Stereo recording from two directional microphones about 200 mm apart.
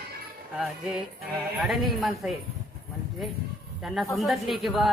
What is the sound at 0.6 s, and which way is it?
Speech, 5° right (ahead or behind).